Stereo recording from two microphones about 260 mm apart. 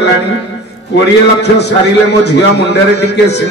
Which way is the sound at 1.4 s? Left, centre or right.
Left.